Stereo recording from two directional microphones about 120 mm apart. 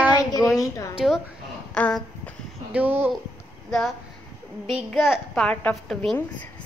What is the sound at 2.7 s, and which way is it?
Speech, 15° right (ahead or behind).